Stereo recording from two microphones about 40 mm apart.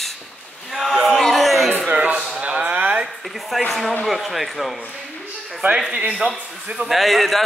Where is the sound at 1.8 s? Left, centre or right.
Right.